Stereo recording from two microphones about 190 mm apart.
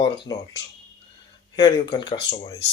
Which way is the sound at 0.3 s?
20° left (ahead or behind).